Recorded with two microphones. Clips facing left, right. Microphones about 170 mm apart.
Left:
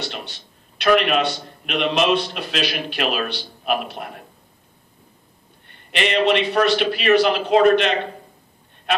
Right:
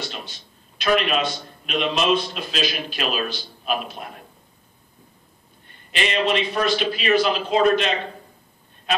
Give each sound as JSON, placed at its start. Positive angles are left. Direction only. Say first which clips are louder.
{"t": 0.0, "sound": "a man's voice", "louder": "left 2 dB", "side_deg": 70}
{"t": 5.9, "sound": "a man's voice", "louder": "left 4 dB", "side_deg": 60}